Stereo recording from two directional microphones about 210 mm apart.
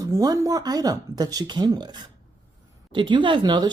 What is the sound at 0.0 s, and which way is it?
Speech, 15° right (ahead or behind).